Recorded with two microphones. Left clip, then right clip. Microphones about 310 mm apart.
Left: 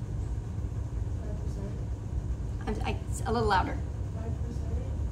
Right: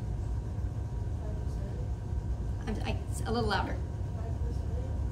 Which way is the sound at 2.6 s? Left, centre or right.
Left.